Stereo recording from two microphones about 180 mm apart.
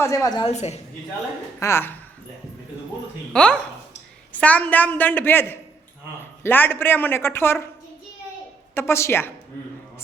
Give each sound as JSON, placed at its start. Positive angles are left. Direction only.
{"t": 0.0, "sound": "a woman's voice", "side_deg": 20}
{"t": 0.4, "sound": "a woman's voice", "side_deg": 40}
{"t": 1.5, "sound": "a woman's voice", "side_deg": 15}
{"t": 3.3, "sound": "a woman's voice", "side_deg": 5}
{"t": 8.7, "sound": "a woman's voice", "side_deg": 15}